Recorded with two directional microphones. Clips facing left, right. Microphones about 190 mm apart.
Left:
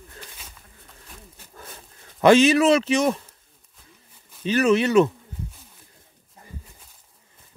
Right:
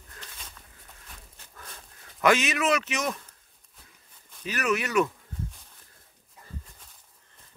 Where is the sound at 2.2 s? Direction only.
30° left (ahead or behind).